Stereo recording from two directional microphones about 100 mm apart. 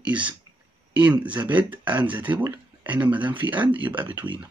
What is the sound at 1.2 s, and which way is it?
Speech, 15° right (ahead or behind).